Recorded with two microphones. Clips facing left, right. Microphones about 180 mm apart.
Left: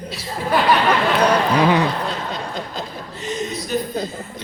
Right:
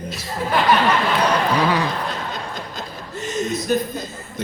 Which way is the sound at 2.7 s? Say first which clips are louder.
Left 1 dB; 45° right (ahead or behind).